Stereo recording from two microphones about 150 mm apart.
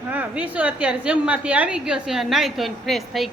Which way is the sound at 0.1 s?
10° right (ahead or behind).